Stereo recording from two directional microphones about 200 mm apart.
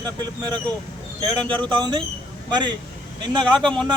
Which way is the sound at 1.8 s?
25° right (ahead or behind).